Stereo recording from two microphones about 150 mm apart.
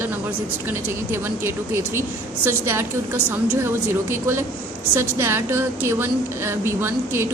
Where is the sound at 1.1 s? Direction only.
15° right (ahead or behind).